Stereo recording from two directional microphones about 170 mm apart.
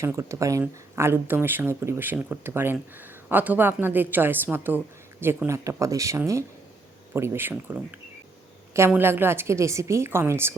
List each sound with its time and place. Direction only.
0.0 s speech: 15° right (ahead or behind)